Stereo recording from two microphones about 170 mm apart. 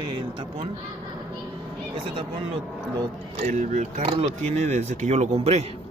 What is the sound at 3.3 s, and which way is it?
Speech, 45° right (ahead or behind).